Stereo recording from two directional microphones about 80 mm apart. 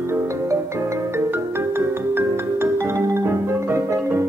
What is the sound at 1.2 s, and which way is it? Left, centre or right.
Music, right.